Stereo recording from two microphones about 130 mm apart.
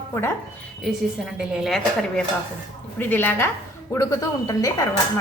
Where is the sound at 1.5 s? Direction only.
Centre (ahead or behind).